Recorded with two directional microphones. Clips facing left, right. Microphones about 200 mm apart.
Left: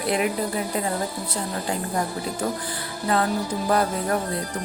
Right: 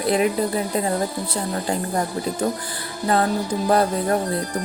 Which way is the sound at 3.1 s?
35° right (ahead or behind).